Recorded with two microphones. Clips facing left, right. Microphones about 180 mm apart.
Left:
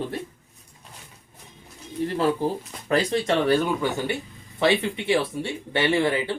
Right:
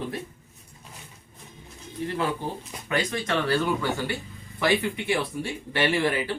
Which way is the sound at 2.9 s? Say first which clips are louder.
Left 5 dB; 30° left (ahead or behind).